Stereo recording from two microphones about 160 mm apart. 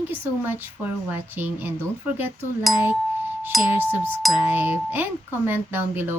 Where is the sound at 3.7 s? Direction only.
10° right (ahead or behind).